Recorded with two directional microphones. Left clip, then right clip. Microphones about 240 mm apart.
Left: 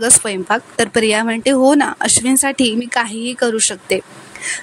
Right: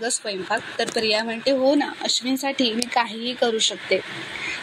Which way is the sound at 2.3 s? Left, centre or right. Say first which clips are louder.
Left 7 dB; left.